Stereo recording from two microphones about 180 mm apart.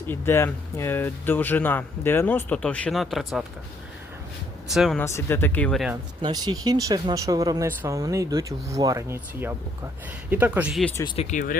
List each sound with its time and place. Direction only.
0.1 s speech: 15° left (ahead or behind)
4.7 s speech: centre (ahead or behind)
4.9 s speech: 15° left (ahead or behind)
6.2 s speech: 20° right (ahead or behind); by 10.8 s 5° right (ahead or behind)
11.3 s speech: 45° left (ahead or behind)